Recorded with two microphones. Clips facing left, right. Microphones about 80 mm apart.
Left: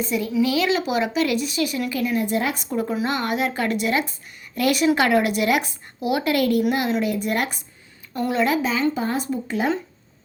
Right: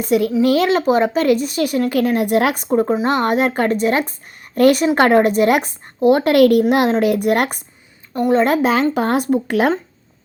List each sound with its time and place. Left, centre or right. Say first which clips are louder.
0.0 s speech: right 8 dB; right
0.4 s speech: right 7 dB; right
2.6 s speech: right 8 dB; right